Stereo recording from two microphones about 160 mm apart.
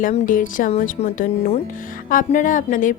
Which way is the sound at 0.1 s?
55° left (ahead or behind).